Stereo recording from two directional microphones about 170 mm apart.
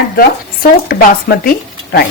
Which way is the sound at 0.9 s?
65° left (ahead or behind).